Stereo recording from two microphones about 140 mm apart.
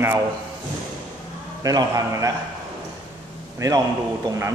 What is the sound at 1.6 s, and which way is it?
Speech, 25° right (ahead or behind).